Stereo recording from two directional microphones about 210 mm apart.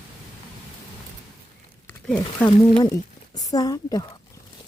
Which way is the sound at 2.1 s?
10° left (ahead or behind).